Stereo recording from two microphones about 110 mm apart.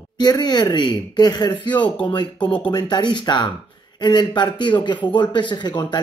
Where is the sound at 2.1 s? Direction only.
45° left (ahead or behind).